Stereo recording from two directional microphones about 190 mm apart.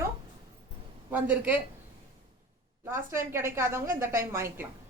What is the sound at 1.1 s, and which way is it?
Speech, 10° right (ahead or behind).